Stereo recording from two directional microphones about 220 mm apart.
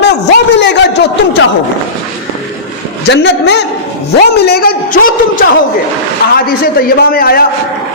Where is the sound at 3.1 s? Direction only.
50° left (ahead or behind).